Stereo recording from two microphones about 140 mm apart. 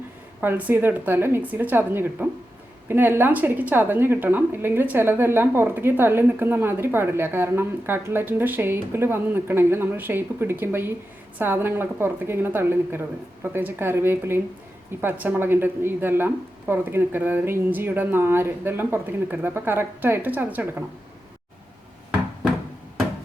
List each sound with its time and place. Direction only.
0.4 s a woman's voice: 15° right (ahead or behind)